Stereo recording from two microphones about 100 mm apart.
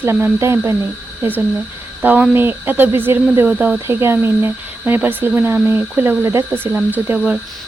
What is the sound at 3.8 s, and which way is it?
Speech, 25° right (ahead or behind).